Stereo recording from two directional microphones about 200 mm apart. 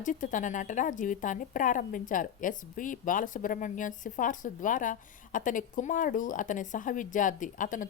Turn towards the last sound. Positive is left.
turn(degrees=40)  # may be behind; listen again after turning